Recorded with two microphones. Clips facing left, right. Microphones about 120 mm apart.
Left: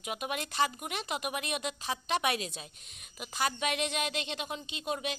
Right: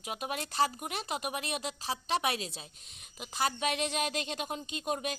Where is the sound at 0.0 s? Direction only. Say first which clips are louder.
Left 1 dB; 30° right (ahead or behind).